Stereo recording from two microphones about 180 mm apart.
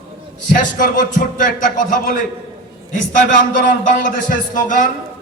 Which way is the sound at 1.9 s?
50° left (ahead or behind).